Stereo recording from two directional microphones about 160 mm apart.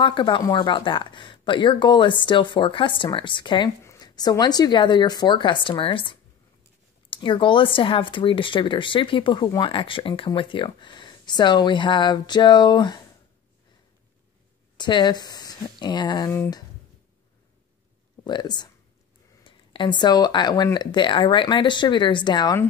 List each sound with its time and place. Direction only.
0.0 s speech: 30° left (ahead or behind)
14.8 s speech: 30° left (ahead or behind)
18.2 s speech: 25° left (ahead or behind)